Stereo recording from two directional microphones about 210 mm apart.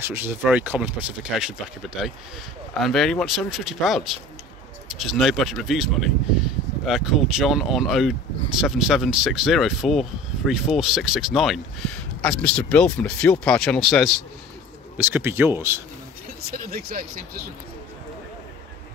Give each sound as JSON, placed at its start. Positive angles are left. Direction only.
{"t": 0.0, "sound": "speech", "side_deg": -10}
{"t": 2.0, "sound": "speech", "side_deg": 0}
{"t": 15.0, "sound": "speech", "side_deg": -10}
{"t": 16.6, "sound": "speech", "side_deg": -45}